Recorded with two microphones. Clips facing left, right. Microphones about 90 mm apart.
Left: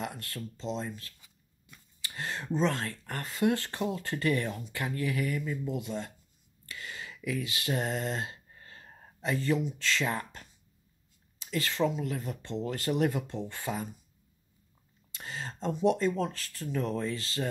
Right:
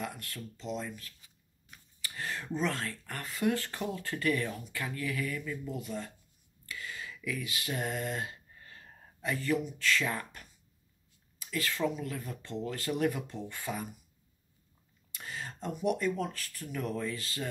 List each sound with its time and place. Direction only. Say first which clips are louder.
0.0 s speech: left 2 dB; 30° left (ahead or behind)
2.0 s speech: left 2 dB; 25° left (ahead or behind)
8.5 s a sound: left 2 dB; 35° left (ahead or behind)
11.5 s speech: left 3 dB; 25° left (ahead or behind)
15.1 s speech: left 2 dB; 30° left (ahead or behind)